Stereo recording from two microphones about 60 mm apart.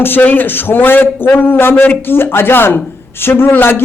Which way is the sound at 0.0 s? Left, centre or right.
Left.